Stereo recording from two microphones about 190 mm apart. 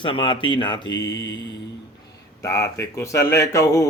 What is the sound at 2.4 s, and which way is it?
Speech, 15° left (ahead or behind).